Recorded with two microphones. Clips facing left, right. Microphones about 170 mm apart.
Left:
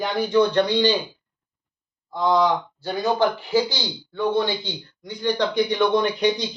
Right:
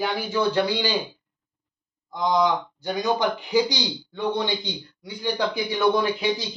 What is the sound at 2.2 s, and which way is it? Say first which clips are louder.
A man's voice: left 2 dB; 15° right (ahead or behind).